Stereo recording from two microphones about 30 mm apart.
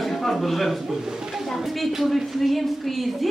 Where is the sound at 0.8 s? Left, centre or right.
Centre.